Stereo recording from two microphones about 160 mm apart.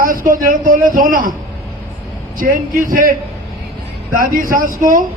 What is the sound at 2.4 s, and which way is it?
Speech, 60° right (ahead or behind).